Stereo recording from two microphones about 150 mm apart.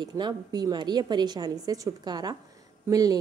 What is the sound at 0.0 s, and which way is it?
A woman's voice, 25° right (ahead or behind).